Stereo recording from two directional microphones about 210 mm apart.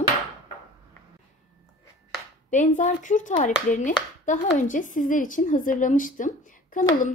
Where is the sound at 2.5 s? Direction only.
35° left (ahead or behind).